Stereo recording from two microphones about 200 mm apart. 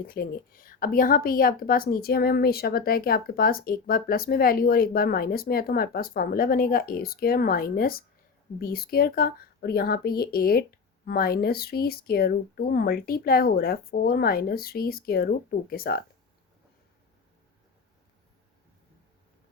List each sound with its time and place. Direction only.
0.0 s a woman's voice: 45° left (ahead or behind)